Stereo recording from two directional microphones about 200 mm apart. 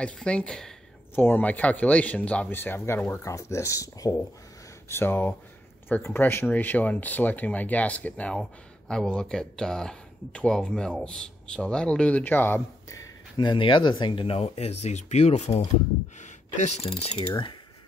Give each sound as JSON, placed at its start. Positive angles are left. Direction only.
{"t": 0.0, "sound": "speech", "side_deg": 5}